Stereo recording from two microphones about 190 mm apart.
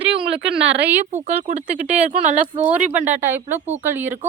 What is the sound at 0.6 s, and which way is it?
Speech, 75° right (ahead or behind).